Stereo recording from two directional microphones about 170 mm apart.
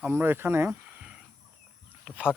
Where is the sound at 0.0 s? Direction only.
15° right (ahead or behind).